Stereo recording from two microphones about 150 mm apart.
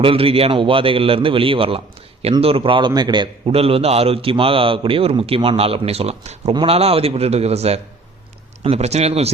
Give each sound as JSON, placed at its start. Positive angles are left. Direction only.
{"t": 0.0, "sound": "a man's voice", "side_deg": -40}